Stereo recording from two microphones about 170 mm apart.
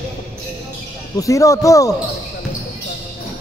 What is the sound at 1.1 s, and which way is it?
Speech, 20° left (ahead or behind).